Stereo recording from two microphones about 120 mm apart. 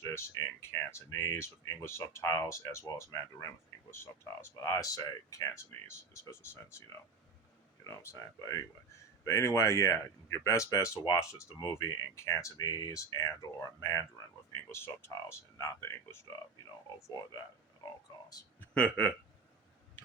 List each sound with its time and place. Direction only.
0.0 s speech: 20° left (ahead or behind)
7.9 s speech: 25° left (ahead or behind)
17.8 s speech: 30° left (ahead or behind)
18.6 s speech: 10° left (ahead or behind)